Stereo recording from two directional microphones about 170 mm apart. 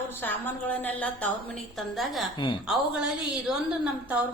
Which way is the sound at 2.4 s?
30° left (ahead or behind).